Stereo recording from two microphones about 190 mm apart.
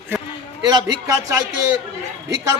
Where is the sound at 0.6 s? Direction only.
20° right (ahead or behind).